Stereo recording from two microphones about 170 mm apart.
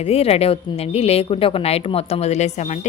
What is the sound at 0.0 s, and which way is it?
A woman's voice, 35° left (ahead or behind).